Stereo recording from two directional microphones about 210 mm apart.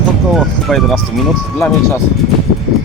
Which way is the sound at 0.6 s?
Centre (ahead or behind).